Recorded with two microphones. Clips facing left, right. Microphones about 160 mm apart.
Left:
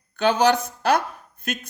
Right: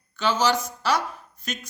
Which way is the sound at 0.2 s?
60° left (ahead or behind).